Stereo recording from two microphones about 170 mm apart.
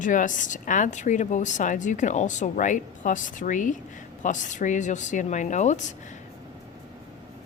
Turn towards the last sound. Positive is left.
turn(degrees=45)  # may be behind; listen again after turning